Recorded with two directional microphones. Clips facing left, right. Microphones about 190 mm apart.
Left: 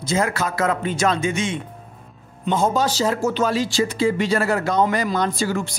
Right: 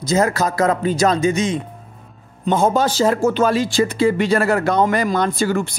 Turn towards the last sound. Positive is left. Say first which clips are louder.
# right 3 dB
turn(degrees=-55)  # may be behind; listen again after turning